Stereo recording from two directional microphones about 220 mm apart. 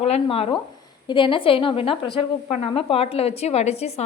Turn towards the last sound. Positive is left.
turn(degrees=30)  # may be behind; listen again after turning